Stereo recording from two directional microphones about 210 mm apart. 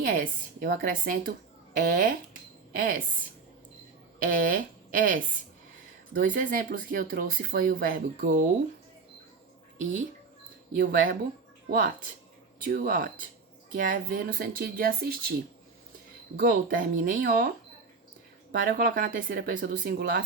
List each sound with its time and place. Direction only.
0.0 s speech: 40° right (ahead or behind)
4.2 s speech: 40° right (ahead or behind)
10.8 s speech: 45° right (ahead or behind)
16.4 s speech: 40° right (ahead or behind)
18.8 s speech: 40° right (ahead or behind)